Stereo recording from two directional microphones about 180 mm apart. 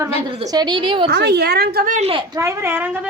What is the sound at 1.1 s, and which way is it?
A woman's voice, 65° right (ahead or behind).